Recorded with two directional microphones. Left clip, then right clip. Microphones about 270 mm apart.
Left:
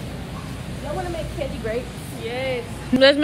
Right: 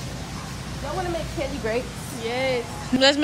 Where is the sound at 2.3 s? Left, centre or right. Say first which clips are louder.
Right 1 dB; right.